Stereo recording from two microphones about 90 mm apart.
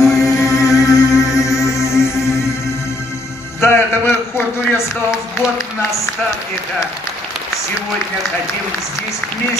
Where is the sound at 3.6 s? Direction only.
30° left (ahead or behind).